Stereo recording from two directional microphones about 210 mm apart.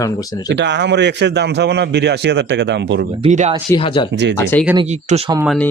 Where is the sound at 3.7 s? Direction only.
25° left (ahead or behind).